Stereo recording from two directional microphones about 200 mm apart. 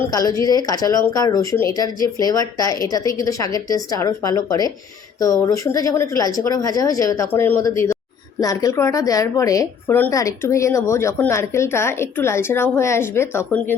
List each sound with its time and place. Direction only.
0.0 s a woman's voice: 20° left (ahead or behind)